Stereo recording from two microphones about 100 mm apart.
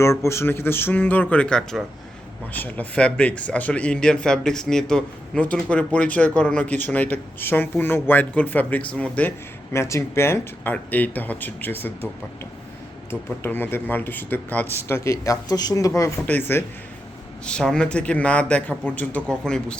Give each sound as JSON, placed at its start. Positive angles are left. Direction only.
{"t": 0.0, "sound": "speech", "side_deg": 30}
{"t": 9.7, "sound": "speech", "side_deg": 25}
{"t": 13.1, "sound": "speech", "side_deg": 20}
{"t": 16.2, "sound": "speech", "side_deg": 20}
{"t": 17.4, "sound": "speech", "side_deg": 5}